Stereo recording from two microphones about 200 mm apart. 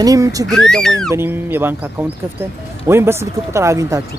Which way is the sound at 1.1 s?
10° right (ahead or behind).